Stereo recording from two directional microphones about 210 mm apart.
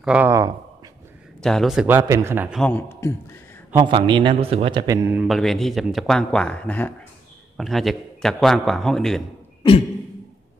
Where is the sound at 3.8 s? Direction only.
25° right (ahead or behind).